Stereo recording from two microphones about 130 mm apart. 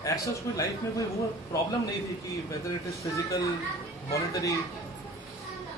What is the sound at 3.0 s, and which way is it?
A man's voice, 25° left (ahead or behind).